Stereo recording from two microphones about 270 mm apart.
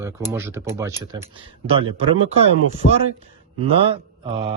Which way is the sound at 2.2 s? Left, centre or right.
Right.